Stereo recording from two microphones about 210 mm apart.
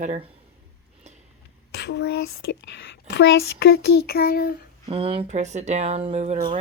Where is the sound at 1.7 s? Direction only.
55° left (ahead or behind).